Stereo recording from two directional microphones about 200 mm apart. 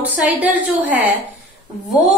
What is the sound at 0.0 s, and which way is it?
A woman's voice, 10° right (ahead or behind).